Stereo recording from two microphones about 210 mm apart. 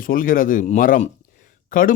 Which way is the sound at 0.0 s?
40° left (ahead or behind).